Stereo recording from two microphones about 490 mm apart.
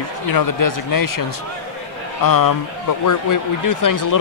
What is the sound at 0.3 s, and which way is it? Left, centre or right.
Speech, left.